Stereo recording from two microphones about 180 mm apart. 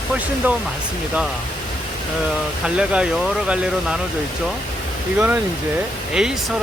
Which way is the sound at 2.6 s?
5° right (ahead or behind).